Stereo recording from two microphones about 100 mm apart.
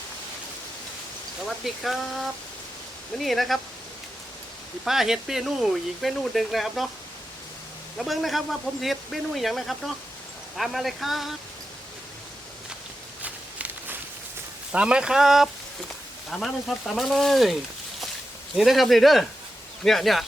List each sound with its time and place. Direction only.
1.5 s speech: centre (ahead or behind)
4.9 s speech: 5° right (ahead or behind)
7.9 s speech: centre (ahead or behind)
13.2 s walk: 15° right (ahead or behind)
14.7 s speech: 10° right (ahead or behind)